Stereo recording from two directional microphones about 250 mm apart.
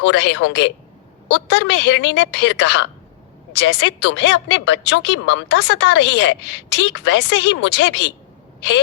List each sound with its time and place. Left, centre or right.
0.0 s a woman's voice: left